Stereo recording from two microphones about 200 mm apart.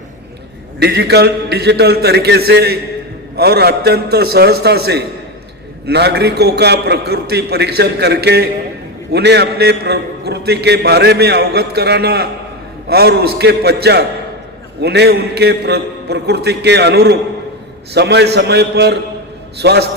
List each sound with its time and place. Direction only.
0.8 s a man's voice: 55° right (ahead or behind)